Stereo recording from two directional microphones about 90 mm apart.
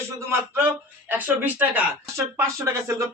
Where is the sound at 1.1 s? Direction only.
20° right (ahead or behind).